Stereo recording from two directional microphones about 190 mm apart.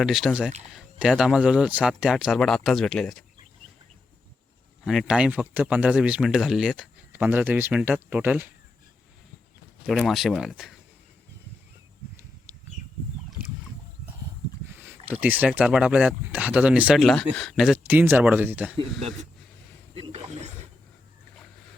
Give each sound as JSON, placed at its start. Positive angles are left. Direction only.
{"t": 0.0, "sound": "speech", "side_deg": 0}
{"t": 4.9, "sound": "speech", "side_deg": 0}
{"t": 9.8, "sound": "speech", "side_deg": 0}
{"t": 14.8, "sound": "speech", "side_deg": -10}
{"t": 20.0, "sound": "speech", "side_deg": -35}